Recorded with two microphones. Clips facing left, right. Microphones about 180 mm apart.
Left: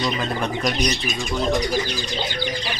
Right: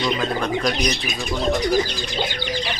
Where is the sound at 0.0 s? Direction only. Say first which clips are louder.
Right 2 dB; 5° left (ahead or behind).